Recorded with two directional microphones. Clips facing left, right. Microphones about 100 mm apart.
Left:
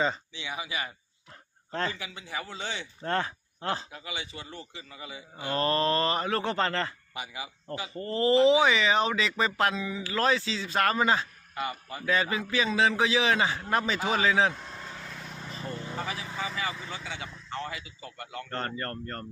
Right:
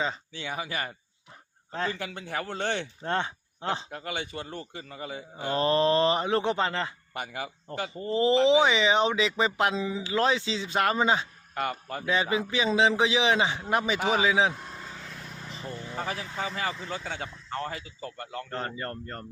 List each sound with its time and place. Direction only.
0.3 s a man's voice: 45° right (ahead or behind)
3.0 s speech: 20° right (ahead or behind)
3.8 s a man's voice: 55° right (ahead or behind)
5.5 s speech: 20° right (ahead or behind)
7.1 s speech: 50° right (ahead or behind)
7.9 s a man's voice: 15° right (ahead or behind)
11.5 s speech: 55° right (ahead or behind)
12.0 s a man's voice: 20° right (ahead or behind)
14.6 s vehicle: 5° right (ahead or behind)
16.0 s a man's voice: 45° right (ahead or behind)
18.5 s a man's voice: 10° right (ahead or behind)